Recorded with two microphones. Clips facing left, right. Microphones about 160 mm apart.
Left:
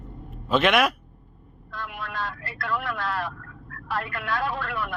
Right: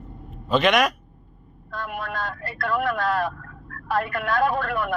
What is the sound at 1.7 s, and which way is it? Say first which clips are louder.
Vehicle: right 5 dB; 45° right (ahead or behind).